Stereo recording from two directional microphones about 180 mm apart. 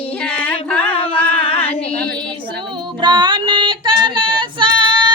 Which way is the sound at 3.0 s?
25° right (ahead or behind).